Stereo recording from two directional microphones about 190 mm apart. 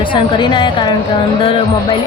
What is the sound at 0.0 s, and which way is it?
Speech, 25° left (ahead or behind).